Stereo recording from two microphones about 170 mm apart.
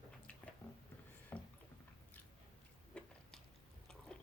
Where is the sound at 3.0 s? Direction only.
5° left (ahead or behind).